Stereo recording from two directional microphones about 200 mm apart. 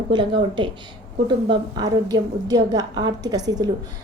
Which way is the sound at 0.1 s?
25° right (ahead or behind).